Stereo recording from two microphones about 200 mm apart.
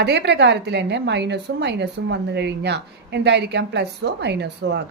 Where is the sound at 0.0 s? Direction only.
60° right (ahead or behind).